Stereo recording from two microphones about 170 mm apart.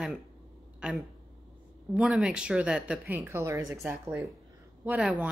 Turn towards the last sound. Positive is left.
turn(degrees=-5)  # may be behind; listen again after turning